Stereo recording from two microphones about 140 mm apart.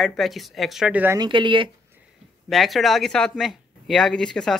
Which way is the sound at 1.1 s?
35° right (ahead or behind).